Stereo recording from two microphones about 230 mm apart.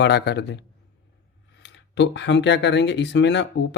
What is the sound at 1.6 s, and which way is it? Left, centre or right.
Speech, left.